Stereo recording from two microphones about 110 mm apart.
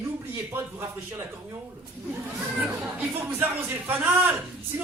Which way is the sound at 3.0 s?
15° right (ahead or behind).